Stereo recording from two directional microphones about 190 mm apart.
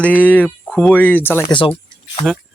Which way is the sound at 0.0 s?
10° left (ahead or behind).